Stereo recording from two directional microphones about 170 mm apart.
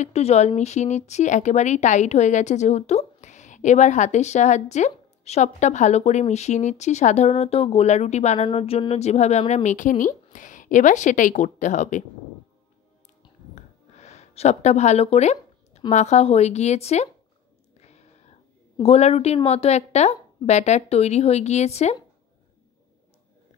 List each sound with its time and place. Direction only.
0.0 s speech: 40° left (ahead or behind)
13.9 s a sound: 40° left (ahead or behind)
15.9 s a woman's voice: 40° left (ahead or behind)
17.7 s whispering: 40° left (ahead or behind)
18.8 s a woman's voice: 35° left (ahead or behind)